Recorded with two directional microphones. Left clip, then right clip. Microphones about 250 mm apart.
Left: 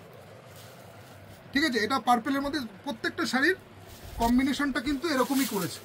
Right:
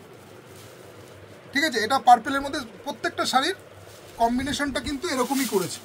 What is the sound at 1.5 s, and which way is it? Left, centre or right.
Speech, right.